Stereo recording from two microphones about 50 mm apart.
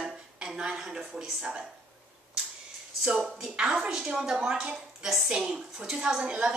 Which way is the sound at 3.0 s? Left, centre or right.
Centre.